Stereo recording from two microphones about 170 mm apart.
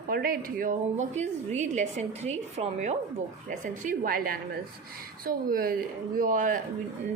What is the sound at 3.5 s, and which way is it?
A woman's voice, 50° right (ahead or behind).